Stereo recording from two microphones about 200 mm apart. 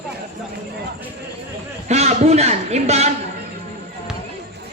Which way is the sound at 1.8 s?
35° right (ahead or behind).